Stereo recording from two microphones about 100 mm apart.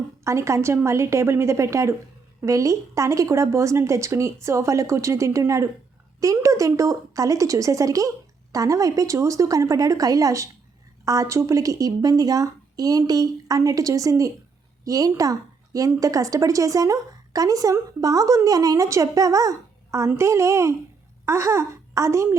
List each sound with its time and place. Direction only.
0.3 s a woman's voice: 30° right (ahead or behind)